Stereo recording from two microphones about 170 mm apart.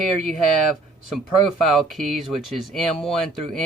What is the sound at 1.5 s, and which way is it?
Speech, centre (ahead or behind).